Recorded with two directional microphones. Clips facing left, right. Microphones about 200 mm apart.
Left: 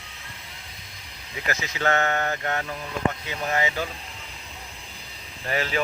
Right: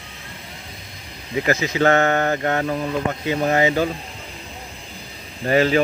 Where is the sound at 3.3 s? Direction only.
35° right (ahead or behind).